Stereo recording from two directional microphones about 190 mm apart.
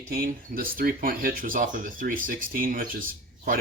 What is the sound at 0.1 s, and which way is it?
Speech, 50° right (ahead or behind).